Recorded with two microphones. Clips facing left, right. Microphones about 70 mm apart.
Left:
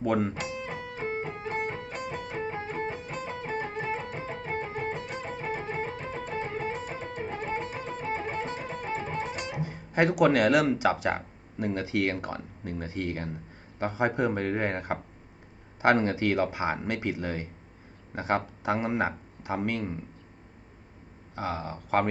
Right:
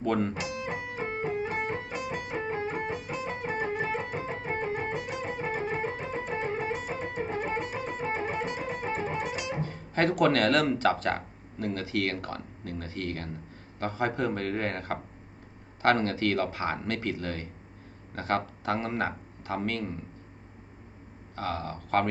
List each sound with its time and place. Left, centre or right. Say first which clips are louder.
0.0 s speech: left 1 dB; centre
0.4 s music: right 1 dB; centre
9.6 s speech: left 3 dB; centre
21.3 s speech: even; centre